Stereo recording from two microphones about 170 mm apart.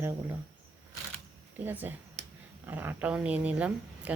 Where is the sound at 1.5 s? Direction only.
10° right (ahead or behind).